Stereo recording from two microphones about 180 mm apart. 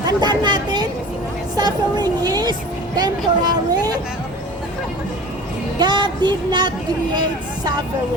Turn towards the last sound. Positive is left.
turn(degrees=-25)  # may be behind; listen again after turning